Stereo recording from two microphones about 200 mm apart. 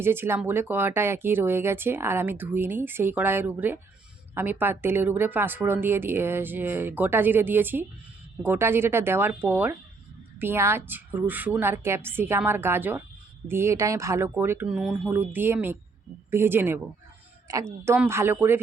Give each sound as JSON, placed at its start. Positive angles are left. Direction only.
{"t": 0.0, "sound": "speech", "side_deg": -10}